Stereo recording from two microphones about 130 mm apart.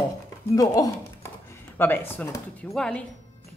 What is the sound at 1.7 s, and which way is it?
A woman's voice, 15° left (ahead or behind).